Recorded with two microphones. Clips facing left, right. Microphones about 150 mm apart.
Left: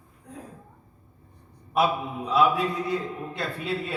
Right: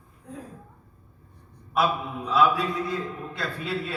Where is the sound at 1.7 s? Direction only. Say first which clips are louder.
Left 1 dB; 20° left (ahead or behind).